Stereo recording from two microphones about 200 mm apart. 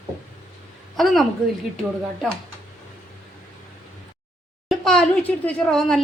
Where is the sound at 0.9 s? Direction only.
Centre (ahead or behind).